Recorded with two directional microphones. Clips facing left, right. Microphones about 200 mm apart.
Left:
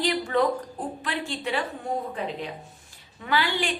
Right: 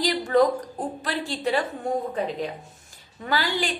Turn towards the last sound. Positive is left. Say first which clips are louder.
# even
turn(degrees=-40)  # may be behind; listen again after turning